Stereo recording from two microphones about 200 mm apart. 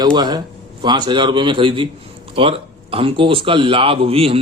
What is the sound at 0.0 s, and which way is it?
A man's voice, 20° right (ahead or behind).